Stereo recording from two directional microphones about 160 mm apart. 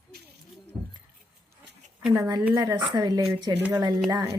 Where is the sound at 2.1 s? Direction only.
20° right (ahead or behind).